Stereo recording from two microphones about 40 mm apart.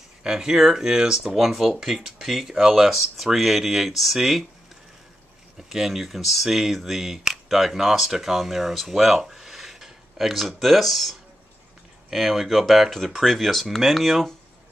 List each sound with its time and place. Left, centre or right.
0.2 s speech: centre
1.2 s speech: centre
5.6 s speech: centre
9.2 s a sound: centre
12.1 s speech: centre